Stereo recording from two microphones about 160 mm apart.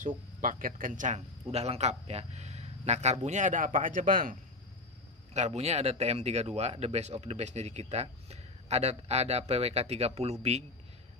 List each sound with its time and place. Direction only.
0.0 s speech: 60° right (ahead or behind)
1.5 s speech: 40° right (ahead or behind); by 4.4 s 60° right (ahead or behind)
5.3 s speech: 45° right (ahead or behind)